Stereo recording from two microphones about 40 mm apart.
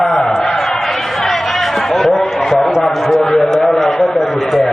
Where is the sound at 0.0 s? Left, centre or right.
Centre.